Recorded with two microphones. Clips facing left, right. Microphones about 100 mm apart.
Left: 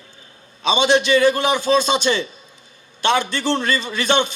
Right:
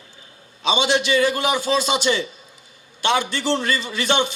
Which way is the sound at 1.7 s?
35° left (ahead or behind).